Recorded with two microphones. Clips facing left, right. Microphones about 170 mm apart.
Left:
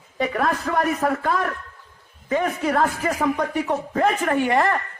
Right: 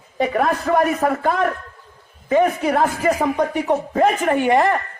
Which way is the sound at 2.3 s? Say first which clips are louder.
Right 5 dB; 15° right (ahead or behind).